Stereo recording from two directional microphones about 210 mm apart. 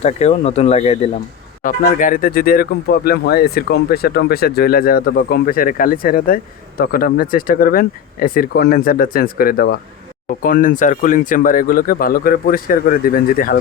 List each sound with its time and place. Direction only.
0.0 s speech: 30° left (ahead or behind)